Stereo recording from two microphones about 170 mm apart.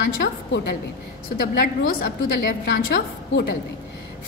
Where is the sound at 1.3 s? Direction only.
60° left (ahead or behind).